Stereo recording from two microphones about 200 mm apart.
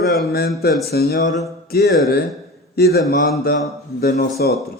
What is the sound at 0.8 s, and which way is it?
Speech, 50° left (ahead or behind).